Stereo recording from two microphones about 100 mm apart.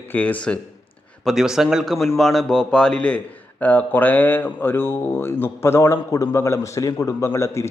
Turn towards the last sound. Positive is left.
turn(degrees=30)  # may be behind; listen again after turning